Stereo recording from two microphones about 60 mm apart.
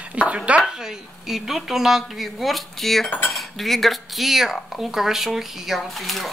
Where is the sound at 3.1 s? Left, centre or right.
Left.